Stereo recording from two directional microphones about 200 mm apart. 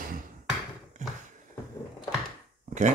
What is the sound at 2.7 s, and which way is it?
Dog, 40° right (ahead or behind).